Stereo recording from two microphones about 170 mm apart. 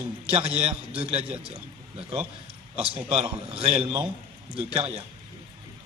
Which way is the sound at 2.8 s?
35° right (ahead or behind).